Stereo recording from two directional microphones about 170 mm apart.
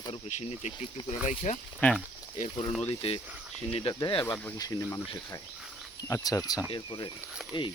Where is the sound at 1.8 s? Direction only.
5° left (ahead or behind).